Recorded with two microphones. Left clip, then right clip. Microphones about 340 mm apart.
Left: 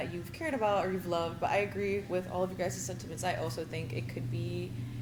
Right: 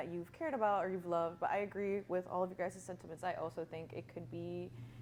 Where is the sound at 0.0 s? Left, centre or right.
Right.